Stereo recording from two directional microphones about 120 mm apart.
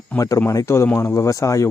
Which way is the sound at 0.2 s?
25° left (ahead or behind).